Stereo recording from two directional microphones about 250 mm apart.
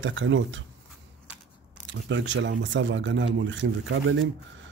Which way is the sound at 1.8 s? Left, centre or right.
Right.